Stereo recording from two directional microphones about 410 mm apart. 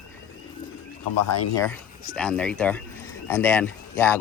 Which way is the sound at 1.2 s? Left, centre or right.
Left.